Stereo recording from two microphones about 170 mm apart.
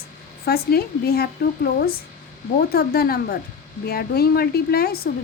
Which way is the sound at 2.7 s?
65° left (ahead or behind).